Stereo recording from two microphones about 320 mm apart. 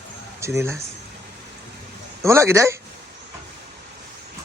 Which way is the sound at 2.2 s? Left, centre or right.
Centre.